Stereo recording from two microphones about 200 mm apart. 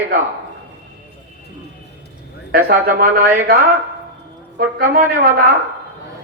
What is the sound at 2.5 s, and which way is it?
A man's voice, 50° right (ahead or behind).